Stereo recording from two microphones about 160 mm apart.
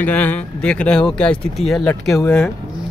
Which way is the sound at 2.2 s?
15° left (ahead or behind).